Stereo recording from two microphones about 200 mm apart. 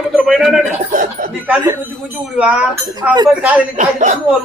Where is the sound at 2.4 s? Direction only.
5° right (ahead or behind).